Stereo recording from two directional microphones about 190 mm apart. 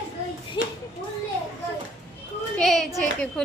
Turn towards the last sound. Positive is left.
turn(degrees=0)  # may be behind; listen again after turning